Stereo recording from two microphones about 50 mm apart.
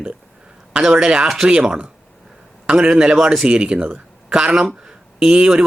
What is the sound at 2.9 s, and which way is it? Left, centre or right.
Speech, centre.